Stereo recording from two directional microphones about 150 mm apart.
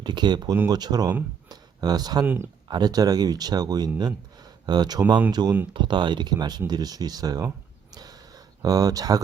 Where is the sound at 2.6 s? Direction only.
30° right (ahead or behind).